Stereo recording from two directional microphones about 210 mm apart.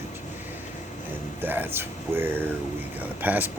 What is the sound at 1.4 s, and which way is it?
Speech, 10° right (ahead or behind).